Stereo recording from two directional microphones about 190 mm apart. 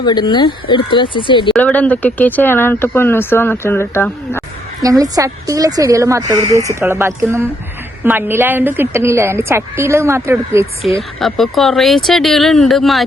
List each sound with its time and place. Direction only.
0.0 s speech: 20° left (ahead or behind)
1.5 s speech: 5° left (ahead or behind)
4.8 s a woman's voice: 20° right (ahead or behind)
11.2 s speech: centre (ahead or behind)